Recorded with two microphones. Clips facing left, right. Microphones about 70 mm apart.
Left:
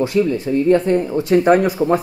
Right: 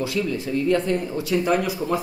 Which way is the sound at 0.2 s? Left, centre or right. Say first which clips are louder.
Left 7 dB; left.